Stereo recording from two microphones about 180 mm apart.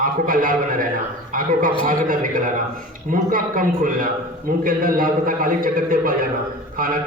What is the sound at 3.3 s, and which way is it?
A man's voice, 50° right (ahead or behind).